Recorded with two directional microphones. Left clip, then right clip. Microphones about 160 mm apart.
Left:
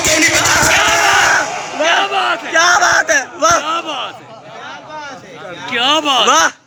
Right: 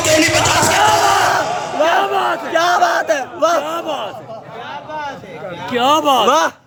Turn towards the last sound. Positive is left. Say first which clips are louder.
# left 2 dB
turn(degrees=-10)  # may be behind; listen again after turning